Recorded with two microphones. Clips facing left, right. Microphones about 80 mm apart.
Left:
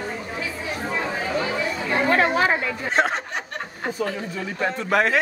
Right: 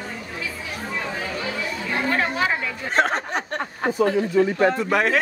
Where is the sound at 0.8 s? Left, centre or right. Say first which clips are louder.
Left 2 dB; left.